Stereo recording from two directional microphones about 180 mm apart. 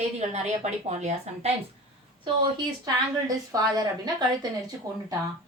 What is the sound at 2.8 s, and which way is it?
A woman's voice, 20° right (ahead or behind).